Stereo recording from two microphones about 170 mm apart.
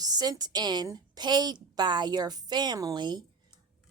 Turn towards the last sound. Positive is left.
turn(degrees=-25)  # may be behind; listen again after turning